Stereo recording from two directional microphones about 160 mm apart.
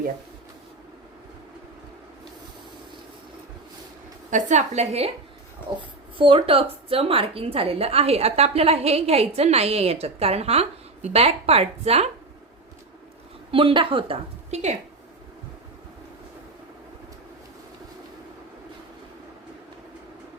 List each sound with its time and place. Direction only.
4.3 s a woman's voice: 50° right (ahead or behind)
5.7 s a child's voice: 30° right (ahead or behind)
13.5 s a woman's voice: 35° right (ahead or behind)